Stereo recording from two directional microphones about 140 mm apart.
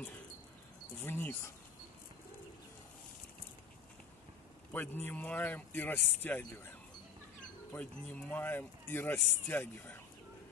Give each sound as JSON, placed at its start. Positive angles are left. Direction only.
{"t": 1.0, "sound": "speech", "side_deg": 15}
{"t": 4.7, "sound": "speech", "side_deg": 15}